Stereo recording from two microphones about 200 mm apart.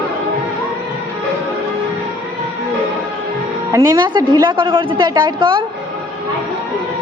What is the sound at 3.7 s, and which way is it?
A woman's voice, 15° right (ahead or behind).